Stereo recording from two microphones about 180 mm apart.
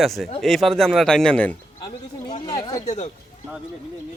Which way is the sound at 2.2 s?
25° left (ahead or behind).